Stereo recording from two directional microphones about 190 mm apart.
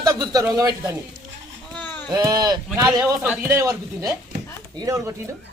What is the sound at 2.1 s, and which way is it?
Speech, 20° right (ahead or behind).